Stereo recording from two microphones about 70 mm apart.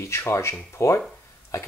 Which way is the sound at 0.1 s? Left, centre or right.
Left.